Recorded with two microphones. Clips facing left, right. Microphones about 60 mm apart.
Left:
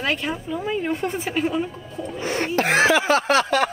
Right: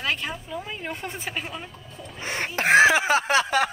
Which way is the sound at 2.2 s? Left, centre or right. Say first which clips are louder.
Left 3 dB; right.